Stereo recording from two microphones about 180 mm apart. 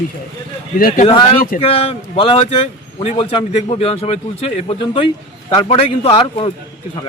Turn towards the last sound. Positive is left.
turn(degrees=30)  # may be behind; listen again after turning